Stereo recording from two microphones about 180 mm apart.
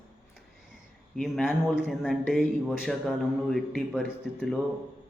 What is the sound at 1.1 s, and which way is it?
A man's voice, centre (ahead or behind).